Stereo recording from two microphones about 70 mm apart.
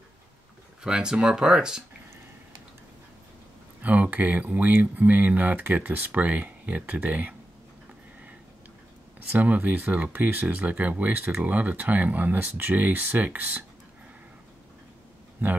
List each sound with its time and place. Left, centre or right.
0.8 s speech: centre
3.8 s speech: right
9.3 s speech: right
15.4 s speech: right